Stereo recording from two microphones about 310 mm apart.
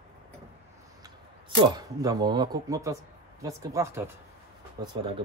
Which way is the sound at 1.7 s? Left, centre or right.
Centre.